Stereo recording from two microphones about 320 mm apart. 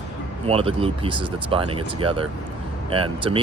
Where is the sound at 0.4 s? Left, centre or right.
Centre.